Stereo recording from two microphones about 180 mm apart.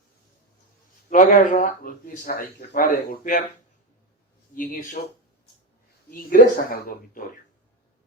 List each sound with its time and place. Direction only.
1.1 s speech: 45° left (ahead or behind)
4.5 s speech: 50° left (ahead or behind)
6.1 s speech: 55° left (ahead or behind)